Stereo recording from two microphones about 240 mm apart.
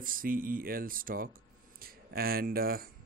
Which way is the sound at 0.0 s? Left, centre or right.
Right.